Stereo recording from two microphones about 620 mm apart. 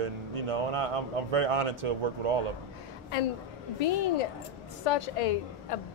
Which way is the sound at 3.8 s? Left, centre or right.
Left.